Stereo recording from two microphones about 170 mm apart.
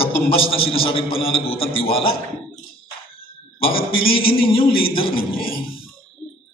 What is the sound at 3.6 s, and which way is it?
A man's voice, 30° left (ahead or behind).